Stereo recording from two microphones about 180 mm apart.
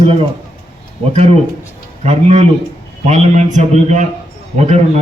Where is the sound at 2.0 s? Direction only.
35° right (ahead or behind).